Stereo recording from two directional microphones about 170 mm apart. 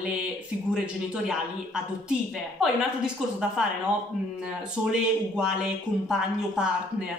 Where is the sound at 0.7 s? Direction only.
5° right (ahead or behind).